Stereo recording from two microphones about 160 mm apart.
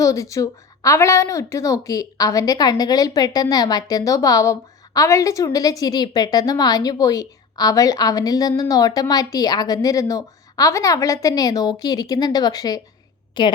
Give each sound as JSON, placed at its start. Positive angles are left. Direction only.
{"t": 0.0, "sound": "a woman's voice", "side_deg": 20}